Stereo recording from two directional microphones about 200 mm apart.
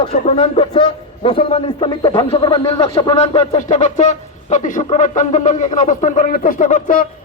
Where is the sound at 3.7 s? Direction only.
35° left (ahead or behind).